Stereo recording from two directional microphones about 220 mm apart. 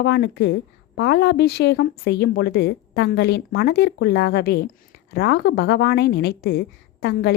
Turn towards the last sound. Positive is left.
turn(degrees=50)  # may be behind; listen again after turning